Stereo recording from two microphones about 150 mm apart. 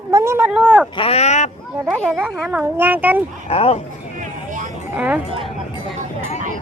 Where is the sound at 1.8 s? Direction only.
10° right (ahead or behind).